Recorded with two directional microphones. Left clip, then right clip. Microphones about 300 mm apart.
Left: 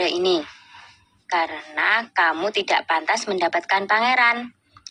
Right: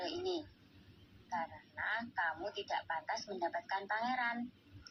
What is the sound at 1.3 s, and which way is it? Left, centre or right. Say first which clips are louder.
A woman's voice: left 19 dB; left.